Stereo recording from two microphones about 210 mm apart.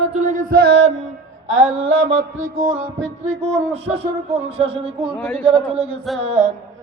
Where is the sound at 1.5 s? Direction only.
75° right (ahead or behind).